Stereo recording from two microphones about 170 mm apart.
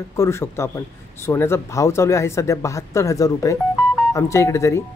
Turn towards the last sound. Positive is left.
turn(degrees=15)  # may be behind; listen again after turning